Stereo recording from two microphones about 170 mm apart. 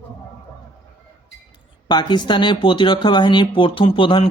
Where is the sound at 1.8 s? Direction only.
25° left (ahead or behind).